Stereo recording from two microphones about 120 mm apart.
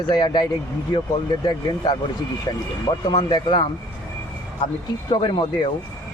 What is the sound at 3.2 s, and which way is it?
Speech, 40° left (ahead or behind).